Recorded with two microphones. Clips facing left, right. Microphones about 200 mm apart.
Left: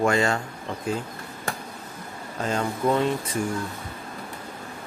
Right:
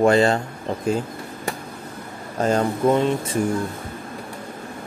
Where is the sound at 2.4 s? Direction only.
40° right (ahead or behind).